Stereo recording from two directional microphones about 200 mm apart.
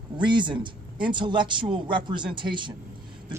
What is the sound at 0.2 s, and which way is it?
Speech, 25° right (ahead or behind).